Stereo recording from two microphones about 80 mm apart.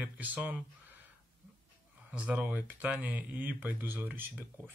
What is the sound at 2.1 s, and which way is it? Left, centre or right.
Speech, centre.